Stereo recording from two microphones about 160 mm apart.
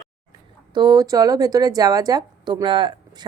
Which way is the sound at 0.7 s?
25° right (ahead or behind).